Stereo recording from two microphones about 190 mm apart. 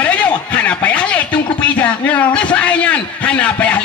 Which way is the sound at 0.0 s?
5° left (ahead or behind).